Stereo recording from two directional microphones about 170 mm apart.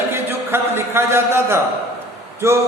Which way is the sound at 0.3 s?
15° right (ahead or behind).